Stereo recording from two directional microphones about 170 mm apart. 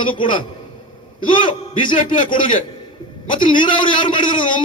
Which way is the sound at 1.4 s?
30° left (ahead or behind).